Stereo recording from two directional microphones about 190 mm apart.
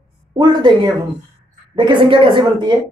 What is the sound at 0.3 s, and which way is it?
A woman's voice, 25° right (ahead or behind).